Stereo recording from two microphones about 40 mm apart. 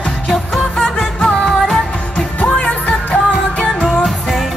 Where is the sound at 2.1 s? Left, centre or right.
Left.